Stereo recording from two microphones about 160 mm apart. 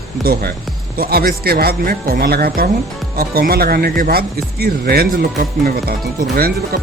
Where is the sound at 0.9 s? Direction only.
70° right (ahead or behind).